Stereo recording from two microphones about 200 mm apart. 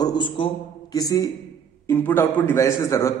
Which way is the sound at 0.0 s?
20° left (ahead or behind).